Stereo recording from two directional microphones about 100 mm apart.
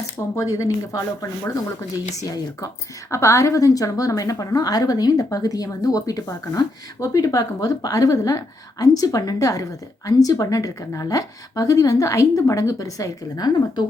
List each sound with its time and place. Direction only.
0.2 s speech: 30° left (ahead or behind)
3.1 s speech: 30° left (ahead or behind)